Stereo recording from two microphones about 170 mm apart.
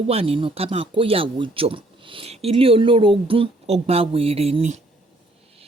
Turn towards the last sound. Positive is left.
turn(degrees=-45)  # may be behind; listen again after turning